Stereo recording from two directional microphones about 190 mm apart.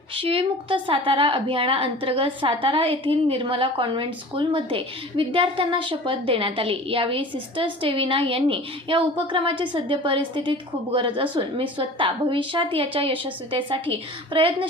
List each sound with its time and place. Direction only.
0.2 s a woman's voice: 30° right (ahead or behind)